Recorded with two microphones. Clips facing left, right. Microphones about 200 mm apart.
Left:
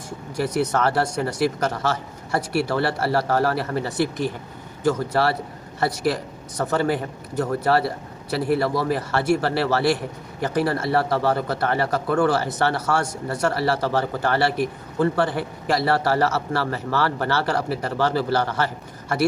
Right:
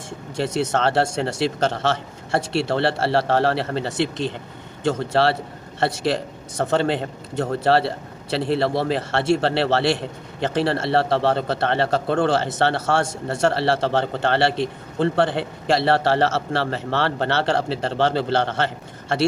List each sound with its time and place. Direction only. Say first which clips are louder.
0.3 s speech: even; 25° right (ahead or behind)